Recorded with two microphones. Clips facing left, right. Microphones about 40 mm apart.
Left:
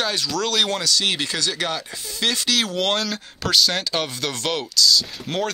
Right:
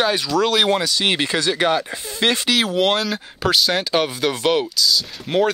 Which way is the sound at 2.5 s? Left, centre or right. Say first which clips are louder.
Right 3 dB; centre.